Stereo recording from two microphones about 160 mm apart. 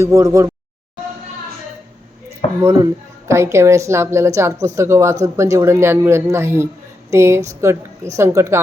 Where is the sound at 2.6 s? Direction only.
15° right (ahead or behind).